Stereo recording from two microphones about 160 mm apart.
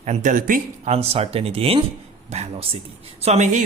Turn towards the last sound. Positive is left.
turn(degrees=-45)  # may be behind; listen again after turning